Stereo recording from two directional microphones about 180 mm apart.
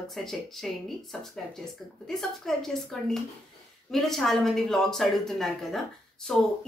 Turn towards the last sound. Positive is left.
turn(degrees=0)  # may be behind; listen again after turning